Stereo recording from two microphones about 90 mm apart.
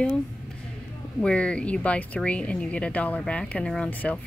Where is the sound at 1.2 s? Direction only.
10° left (ahead or behind).